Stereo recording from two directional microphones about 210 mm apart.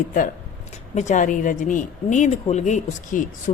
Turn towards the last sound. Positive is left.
turn(degrees=35)  # may be behind; listen again after turning